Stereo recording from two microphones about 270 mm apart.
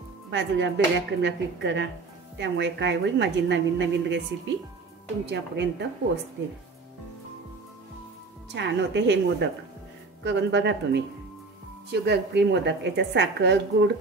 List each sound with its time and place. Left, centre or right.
0.3 s a woman's voice: right
5.2 s a woman's voice: right
8.5 s a woman's voice: right